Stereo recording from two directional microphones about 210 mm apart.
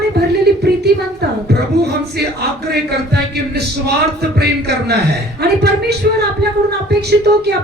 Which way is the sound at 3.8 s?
50° right (ahead or behind).